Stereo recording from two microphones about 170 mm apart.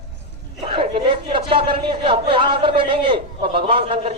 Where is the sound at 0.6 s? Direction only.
30° right (ahead or behind).